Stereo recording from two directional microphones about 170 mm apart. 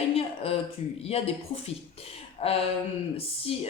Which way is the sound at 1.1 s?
35° left (ahead or behind).